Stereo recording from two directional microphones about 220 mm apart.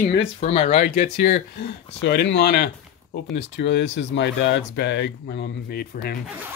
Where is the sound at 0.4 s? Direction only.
30° left (ahead or behind).